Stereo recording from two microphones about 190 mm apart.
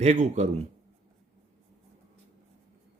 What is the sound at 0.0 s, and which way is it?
Speech, 35° right (ahead or behind).